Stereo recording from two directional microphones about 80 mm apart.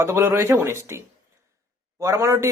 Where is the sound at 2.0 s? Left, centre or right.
Right.